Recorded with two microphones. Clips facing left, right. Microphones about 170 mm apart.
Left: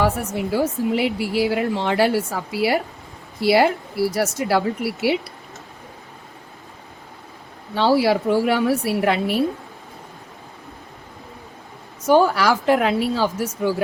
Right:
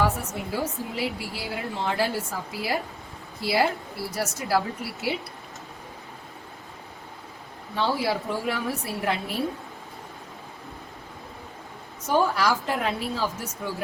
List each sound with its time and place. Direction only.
0.5 s a woman's voice: 85° left
7.8 s a woman's voice: 80° left
12.0 s a woman's voice: 85° left